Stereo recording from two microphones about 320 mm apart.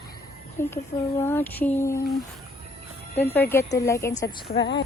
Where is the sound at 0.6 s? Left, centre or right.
Centre.